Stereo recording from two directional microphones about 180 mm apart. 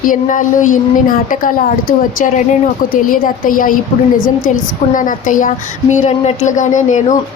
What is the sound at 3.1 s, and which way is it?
Speech, 50° left (ahead or behind).